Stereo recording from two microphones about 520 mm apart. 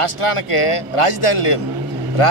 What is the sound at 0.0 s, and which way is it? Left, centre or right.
A man's voice, left.